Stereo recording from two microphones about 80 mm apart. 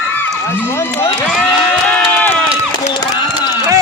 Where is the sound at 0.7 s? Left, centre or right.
Left.